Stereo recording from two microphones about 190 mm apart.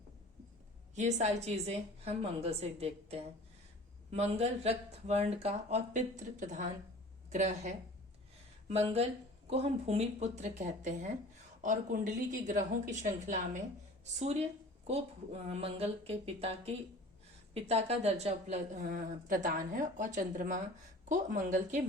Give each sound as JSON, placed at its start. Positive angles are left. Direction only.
{"t": 0.9, "sound": "a woman's voice", "side_deg": -35}